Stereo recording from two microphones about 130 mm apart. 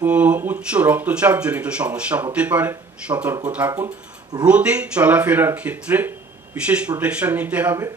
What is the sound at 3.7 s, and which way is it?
Speech, 30° right (ahead or behind).